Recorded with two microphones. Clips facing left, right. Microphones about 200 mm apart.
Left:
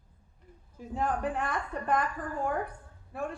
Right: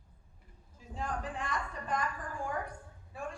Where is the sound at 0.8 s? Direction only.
60° left (ahead or behind).